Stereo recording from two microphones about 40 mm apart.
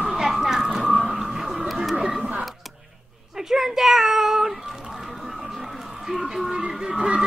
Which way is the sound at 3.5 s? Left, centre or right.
Centre.